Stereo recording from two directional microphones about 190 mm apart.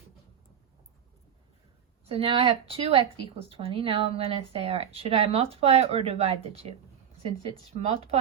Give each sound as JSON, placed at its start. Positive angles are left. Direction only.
{"t": 2.1, "sound": "speech", "side_deg": -30}